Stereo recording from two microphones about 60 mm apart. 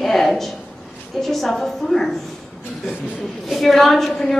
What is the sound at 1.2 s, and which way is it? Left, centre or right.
Speech, centre.